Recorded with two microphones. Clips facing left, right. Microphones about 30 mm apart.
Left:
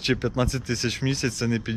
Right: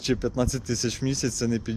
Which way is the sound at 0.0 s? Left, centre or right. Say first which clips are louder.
Left 1 dB; left.